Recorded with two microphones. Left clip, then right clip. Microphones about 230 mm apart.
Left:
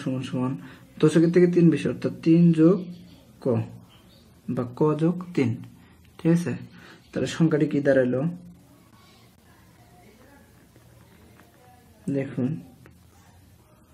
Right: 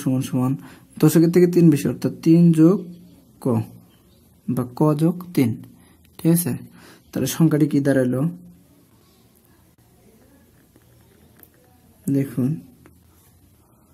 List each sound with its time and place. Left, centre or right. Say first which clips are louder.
0.0 s a woman's voice: right 6 dB; right
12.2 s speech: right 2 dB; right